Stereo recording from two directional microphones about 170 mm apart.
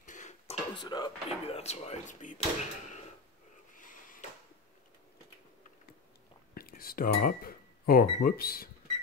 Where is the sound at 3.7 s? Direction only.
50° left (ahead or behind).